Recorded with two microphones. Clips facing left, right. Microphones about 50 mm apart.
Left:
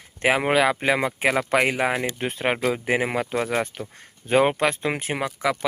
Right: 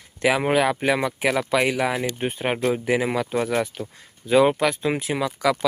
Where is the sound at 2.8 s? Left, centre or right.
Left.